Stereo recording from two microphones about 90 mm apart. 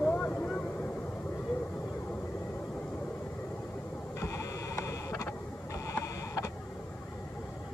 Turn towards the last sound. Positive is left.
turn(degrees=35)  # may be behind; listen again after turning